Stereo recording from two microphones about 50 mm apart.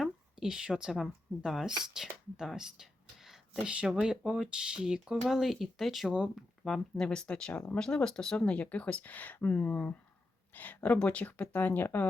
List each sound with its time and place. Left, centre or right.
0.0 s a sound: centre
1.5 s speech: centre
3.6 s speech: right
3.8 s speech: centre
6.9 s speech: centre
8.7 s speech: left
10.8 s speech: left